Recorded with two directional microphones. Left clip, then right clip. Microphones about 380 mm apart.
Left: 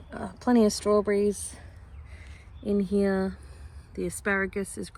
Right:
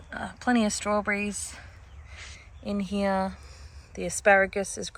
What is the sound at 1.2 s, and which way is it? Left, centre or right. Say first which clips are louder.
Speech: left 7 dB; right.